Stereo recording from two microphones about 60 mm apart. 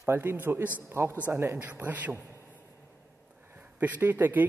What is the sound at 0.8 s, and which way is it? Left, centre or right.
Speech, right.